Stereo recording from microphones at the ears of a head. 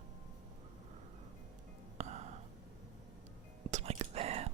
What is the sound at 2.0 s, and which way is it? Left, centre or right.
Music, right.